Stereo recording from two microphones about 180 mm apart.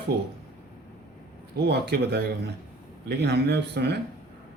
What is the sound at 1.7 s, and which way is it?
A man's voice, 65° right (ahead or behind).